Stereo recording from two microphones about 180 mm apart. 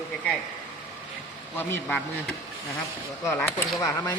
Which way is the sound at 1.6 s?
10° left (ahead or behind).